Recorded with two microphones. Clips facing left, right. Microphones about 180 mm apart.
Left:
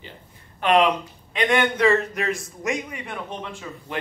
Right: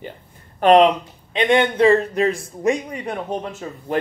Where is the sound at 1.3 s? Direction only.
25° right (ahead or behind).